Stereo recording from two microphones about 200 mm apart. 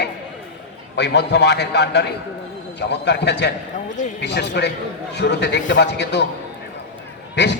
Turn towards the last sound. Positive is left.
turn(degrees=60)  # may be behind; listen again after turning